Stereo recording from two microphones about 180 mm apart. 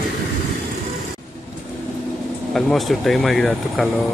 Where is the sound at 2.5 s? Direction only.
Centre (ahead or behind).